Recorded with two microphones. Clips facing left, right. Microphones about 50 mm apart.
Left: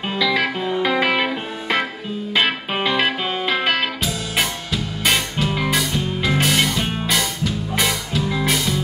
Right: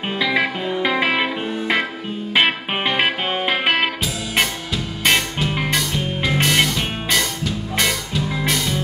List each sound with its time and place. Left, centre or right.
0.2 s music: right
0.8 s music: centre
2.3 s music: right
5.0 s music: centre